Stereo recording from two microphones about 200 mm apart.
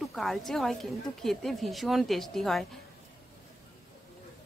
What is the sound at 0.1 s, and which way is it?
Speech, centre (ahead or behind).